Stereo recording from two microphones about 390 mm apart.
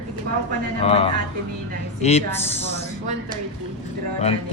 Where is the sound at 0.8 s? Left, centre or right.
Centre.